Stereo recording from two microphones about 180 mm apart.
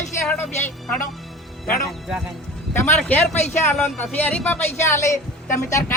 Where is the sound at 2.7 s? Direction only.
10° left (ahead or behind).